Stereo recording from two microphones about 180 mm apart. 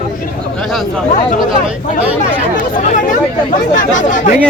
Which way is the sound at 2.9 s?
45° left (ahead or behind).